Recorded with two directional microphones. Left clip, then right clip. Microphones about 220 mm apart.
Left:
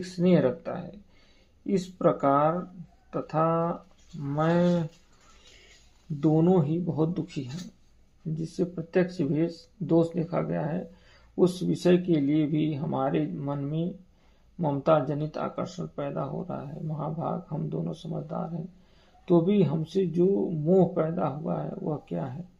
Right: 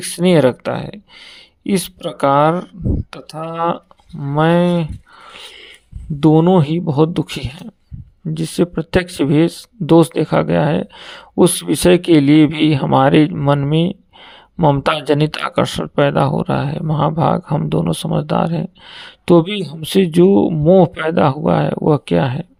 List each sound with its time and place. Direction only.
0.2 s speech: 35° right (ahead or behind)
2.1 s speech: 35° right (ahead or behind)
3.2 s speech: centre (ahead or behind)
4.4 s speech: 35° right (ahead or behind)
6.1 s speech: 40° right (ahead or behind)